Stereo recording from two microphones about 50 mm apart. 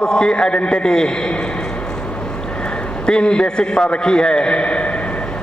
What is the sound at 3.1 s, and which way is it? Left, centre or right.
A man's voice, centre.